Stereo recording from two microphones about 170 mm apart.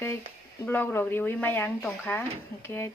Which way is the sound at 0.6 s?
10° left (ahead or behind).